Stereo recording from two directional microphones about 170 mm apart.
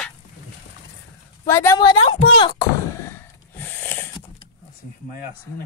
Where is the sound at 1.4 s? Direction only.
15° left (ahead or behind).